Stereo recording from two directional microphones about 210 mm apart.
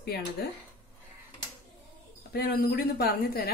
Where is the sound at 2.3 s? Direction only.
45° left (ahead or behind).